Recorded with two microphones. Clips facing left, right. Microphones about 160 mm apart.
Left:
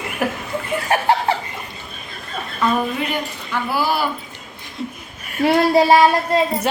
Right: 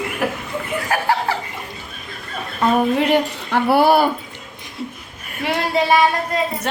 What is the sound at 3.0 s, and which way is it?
Speech, 65° right (ahead or behind).